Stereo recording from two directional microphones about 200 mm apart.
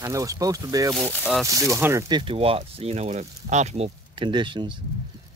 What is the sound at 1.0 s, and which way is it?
Speech, centre (ahead or behind).